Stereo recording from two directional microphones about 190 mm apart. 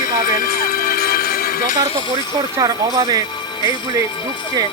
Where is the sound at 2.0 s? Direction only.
20° right (ahead or behind).